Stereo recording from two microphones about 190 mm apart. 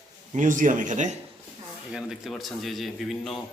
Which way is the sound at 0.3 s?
45° right (ahead or behind).